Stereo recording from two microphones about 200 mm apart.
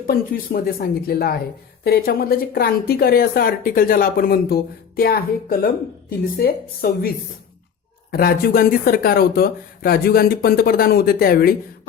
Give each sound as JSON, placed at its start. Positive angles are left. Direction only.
{"t": 0.1, "sound": "speech", "side_deg": 50}
{"t": 8.1, "sound": "speech", "side_deg": 50}